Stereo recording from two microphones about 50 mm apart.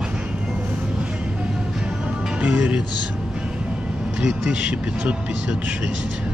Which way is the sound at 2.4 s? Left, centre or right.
Right.